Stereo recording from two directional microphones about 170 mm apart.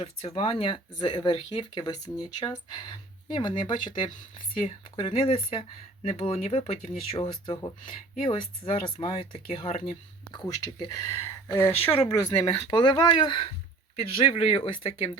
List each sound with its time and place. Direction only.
0.0 s speech: 35° left (ahead or behind)
10.3 s speech: 20° left (ahead or behind)